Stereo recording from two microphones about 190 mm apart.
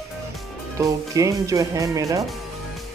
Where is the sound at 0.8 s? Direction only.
15° right (ahead or behind).